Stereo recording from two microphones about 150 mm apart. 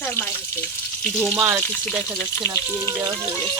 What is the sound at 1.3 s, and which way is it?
Speech, 20° right (ahead or behind).